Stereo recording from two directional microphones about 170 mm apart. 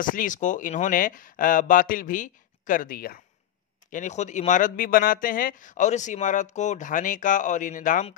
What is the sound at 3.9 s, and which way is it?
Speech, 45° left (ahead or behind).